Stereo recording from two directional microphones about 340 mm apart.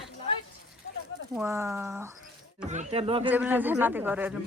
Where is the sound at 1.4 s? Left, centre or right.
Centre.